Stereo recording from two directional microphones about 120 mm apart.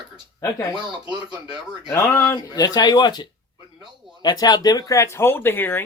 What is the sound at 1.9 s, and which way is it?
Speech, 20° left (ahead or behind).